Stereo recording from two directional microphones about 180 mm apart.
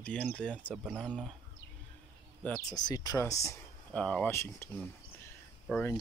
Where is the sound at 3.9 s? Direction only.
5° left (ahead or behind).